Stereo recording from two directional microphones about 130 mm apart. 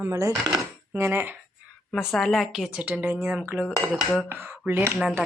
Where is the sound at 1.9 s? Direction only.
Centre (ahead or behind); by 4.9 s 15° right (ahead or behind).